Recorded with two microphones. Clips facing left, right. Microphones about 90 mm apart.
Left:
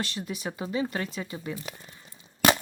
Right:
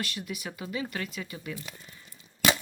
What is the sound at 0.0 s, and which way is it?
Speech, 30° left (ahead or behind).